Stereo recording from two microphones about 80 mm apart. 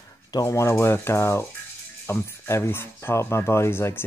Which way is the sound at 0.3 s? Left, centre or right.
Left.